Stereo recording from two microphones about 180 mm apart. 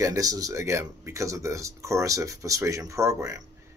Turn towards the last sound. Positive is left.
turn(degrees=-15)  # may be behind; listen again after turning